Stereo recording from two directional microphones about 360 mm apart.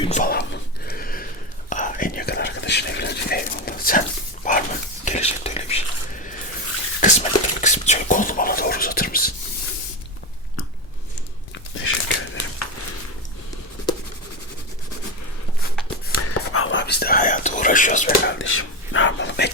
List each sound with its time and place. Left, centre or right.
0.0 s a sound: left
1.7 s whispering: left
4.4 s dog: left
5.0 s whispering: centre
7.0 s a sound: centre
11.8 s a sound: left
13.9 s writing: centre
16.1 s whispering: left
18.3 s whispering: left